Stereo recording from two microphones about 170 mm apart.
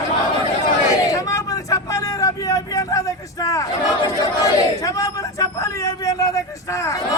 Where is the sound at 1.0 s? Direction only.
20° left (ahead or behind).